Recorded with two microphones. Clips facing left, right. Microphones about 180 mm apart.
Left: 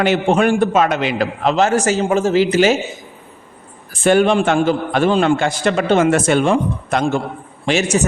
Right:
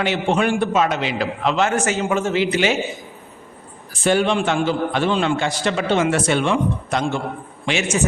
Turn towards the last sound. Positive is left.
turn(degrees=40)  # may be behind; listen again after turning